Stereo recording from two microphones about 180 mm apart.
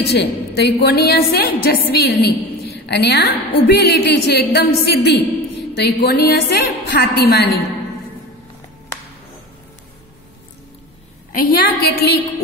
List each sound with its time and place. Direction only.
0.1 s a woman's voice: 65° left (ahead or behind)
11.3 s a woman's voice: 55° left (ahead or behind)